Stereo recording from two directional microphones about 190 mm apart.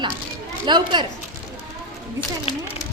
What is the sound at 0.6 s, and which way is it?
Speech, 25° right (ahead or behind).